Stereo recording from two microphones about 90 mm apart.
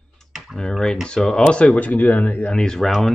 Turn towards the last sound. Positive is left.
turn(degrees=0)  # may be behind; listen again after turning